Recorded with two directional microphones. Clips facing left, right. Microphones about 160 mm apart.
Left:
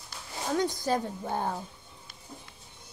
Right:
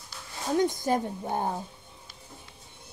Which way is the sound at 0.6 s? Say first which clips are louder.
Right 3 dB; 20° right (ahead or behind).